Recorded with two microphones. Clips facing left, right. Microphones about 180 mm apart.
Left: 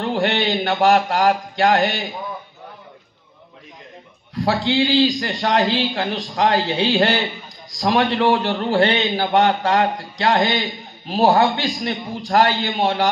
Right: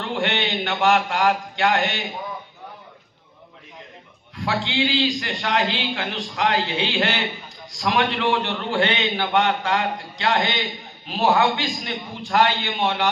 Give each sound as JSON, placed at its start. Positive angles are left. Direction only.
{"t": 0.0, "sound": "speech", "side_deg": 35}
{"t": 4.4, "sound": "a man's voice", "side_deg": 35}